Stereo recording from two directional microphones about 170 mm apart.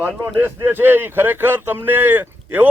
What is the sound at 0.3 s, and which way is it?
Speech, 15° right (ahead or behind).